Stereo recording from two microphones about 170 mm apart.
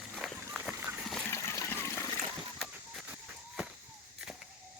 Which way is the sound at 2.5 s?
Centre (ahead or behind).